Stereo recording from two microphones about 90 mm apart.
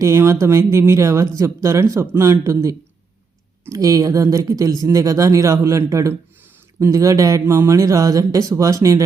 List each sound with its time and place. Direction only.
0.0 s speech: 30° right (ahead or behind)